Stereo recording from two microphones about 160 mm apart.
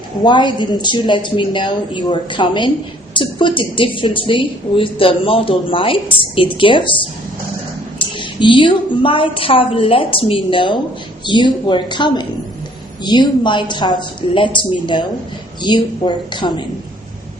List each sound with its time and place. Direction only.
0.3 s a woman's voice: 30° left (ahead or behind)